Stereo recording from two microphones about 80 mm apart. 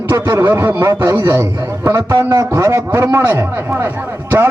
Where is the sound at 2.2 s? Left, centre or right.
Right.